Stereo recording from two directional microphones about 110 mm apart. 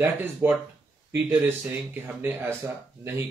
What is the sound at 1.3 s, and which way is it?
A man's voice, 20° right (ahead or behind).